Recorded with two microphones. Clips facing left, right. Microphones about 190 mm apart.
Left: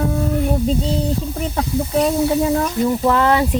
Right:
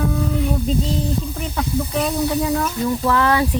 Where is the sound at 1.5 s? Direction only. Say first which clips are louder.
Left 3 dB; 30° left (ahead or behind).